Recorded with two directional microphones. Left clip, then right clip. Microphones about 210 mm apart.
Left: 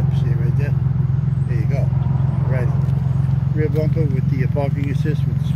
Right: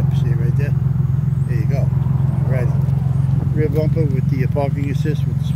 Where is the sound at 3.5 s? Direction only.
10° right (ahead or behind).